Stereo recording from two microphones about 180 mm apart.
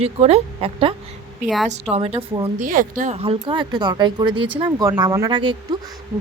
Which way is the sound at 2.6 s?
45° right (ahead or behind).